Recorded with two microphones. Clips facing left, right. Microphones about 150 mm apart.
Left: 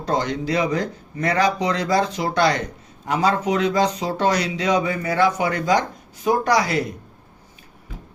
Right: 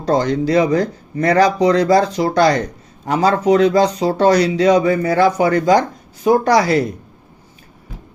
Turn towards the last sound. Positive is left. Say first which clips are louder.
# right 6 dB
turn(degrees=-35)  # may be behind; listen again after turning